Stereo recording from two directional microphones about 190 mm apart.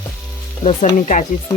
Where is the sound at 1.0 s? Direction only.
40° left (ahead or behind).